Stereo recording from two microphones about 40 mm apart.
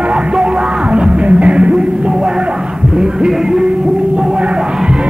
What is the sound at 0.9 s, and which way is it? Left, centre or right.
Music, right.